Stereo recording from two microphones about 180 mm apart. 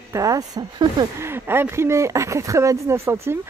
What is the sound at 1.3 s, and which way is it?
Speech, 10° right (ahead or behind).